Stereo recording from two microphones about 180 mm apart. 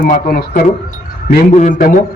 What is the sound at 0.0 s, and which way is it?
A man's voice, 50° left (ahead or behind).